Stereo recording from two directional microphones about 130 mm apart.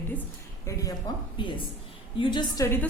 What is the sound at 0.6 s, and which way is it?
Speech, 25° left (ahead or behind).